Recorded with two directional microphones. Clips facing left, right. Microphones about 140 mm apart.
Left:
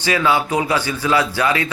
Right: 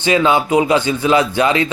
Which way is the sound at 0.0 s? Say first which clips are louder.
Right 4 dB; 20° right (ahead or behind).